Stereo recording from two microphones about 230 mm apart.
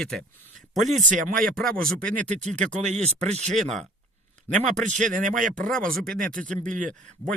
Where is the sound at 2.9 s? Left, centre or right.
Right.